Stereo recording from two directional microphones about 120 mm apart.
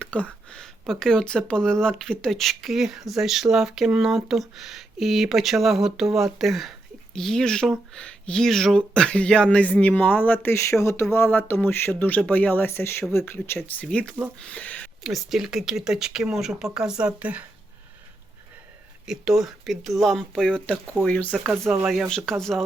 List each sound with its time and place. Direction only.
0.0 s speech: 10° left (ahead or behind)
13.8 s speech: 5° left (ahead or behind)
15.0 s speech: centre (ahead or behind)
19.0 s speech: 5° right (ahead or behind); by 21.3 s 15° left (ahead or behind)
21.8 s speech: centre (ahead or behind)